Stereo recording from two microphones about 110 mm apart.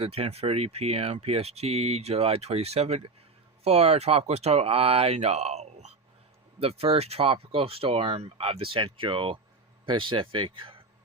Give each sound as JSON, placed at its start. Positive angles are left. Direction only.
{"t": 0.0, "sound": "speech", "side_deg": -60}
{"t": 6.6, "sound": "a man's voice", "side_deg": -65}